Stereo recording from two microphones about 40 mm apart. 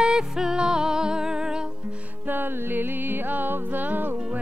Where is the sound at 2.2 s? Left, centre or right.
Right.